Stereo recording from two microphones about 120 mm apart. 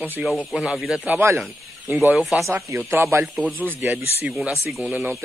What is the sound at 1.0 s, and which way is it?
Speech, 20° right (ahead or behind).